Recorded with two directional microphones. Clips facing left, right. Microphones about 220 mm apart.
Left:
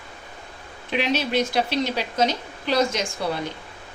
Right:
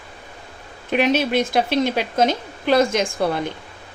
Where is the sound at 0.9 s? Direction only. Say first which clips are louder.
Right 5 dB; 50° right (ahead or behind).